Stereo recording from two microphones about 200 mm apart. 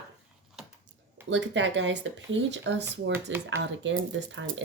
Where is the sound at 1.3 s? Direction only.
65° right (ahead or behind).